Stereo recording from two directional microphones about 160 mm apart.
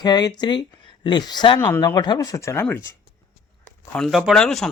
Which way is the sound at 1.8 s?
25° left (ahead or behind).